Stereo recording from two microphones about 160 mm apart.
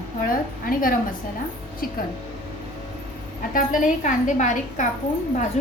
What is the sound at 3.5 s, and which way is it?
A woman's voice, 55° left (ahead or behind).